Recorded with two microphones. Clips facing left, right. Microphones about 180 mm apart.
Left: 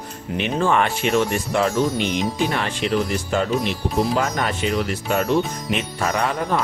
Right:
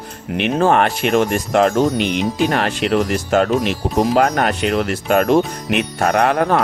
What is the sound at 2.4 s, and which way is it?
Speech, 70° right (ahead or behind).